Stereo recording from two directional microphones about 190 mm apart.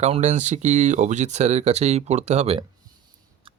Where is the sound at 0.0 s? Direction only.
35° right (ahead or behind).